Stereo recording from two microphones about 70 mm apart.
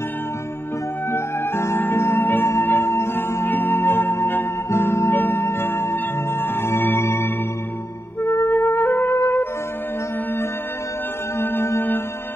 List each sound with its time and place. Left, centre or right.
1.1 s music: left
8.3 s music: left
11.3 s music: left